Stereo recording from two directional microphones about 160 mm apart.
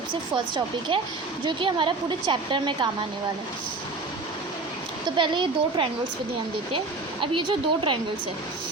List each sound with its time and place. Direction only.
0.1 s a woman's voice: 30° right (ahead or behind)
5.1 s a woman's voice: 30° right (ahead or behind)
7.2 s a woman's voice: 30° right (ahead or behind)